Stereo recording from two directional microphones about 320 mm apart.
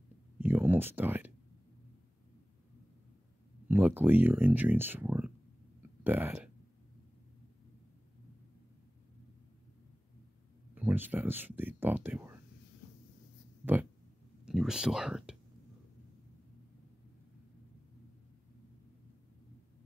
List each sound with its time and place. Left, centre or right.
0.4 s a sound: centre
3.6 s speech: centre
10.7 s speech: centre
14.4 s speech: centre